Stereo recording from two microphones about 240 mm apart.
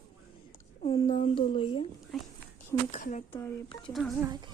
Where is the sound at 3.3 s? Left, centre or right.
Left.